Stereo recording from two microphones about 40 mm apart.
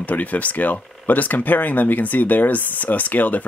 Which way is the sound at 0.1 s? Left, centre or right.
Left.